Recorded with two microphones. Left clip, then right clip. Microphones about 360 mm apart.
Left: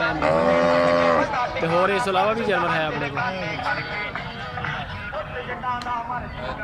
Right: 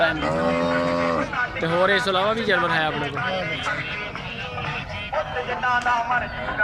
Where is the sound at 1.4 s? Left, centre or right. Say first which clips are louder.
Left 1 dB; centre.